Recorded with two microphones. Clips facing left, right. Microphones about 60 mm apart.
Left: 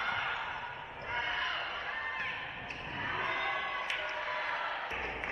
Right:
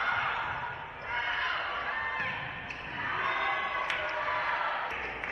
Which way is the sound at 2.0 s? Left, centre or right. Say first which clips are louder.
Right 4 dB; right.